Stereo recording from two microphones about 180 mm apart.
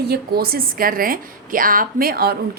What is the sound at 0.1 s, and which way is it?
A woman's voice, 55° right (ahead or behind).